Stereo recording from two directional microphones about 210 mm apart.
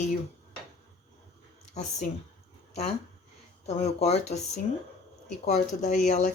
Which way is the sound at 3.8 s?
30° left (ahead or behind).